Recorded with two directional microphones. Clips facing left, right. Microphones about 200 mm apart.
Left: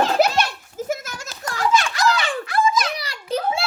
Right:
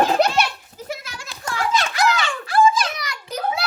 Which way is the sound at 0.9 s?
45° left (ahead or behind).